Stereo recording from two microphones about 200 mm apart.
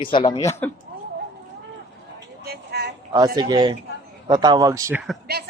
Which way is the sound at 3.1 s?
20° right (ahead or behind).